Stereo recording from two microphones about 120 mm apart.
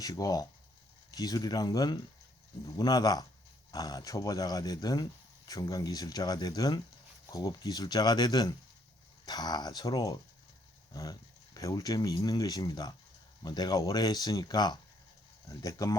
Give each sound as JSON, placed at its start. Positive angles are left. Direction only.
{"t": 0.0, "sound": "speech", "side_deg": 30}